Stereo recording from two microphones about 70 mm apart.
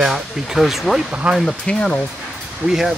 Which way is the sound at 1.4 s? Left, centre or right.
Centre.